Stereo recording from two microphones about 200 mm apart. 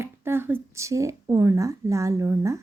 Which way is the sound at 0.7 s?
15° right (ahead or behind).